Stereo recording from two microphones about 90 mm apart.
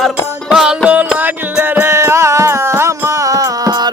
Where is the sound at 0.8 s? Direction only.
15° right (ahead or behind).